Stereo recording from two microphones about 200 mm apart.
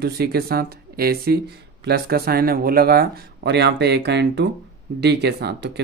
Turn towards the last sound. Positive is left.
turn(degrees=-55)  # may be behind; listen again after turning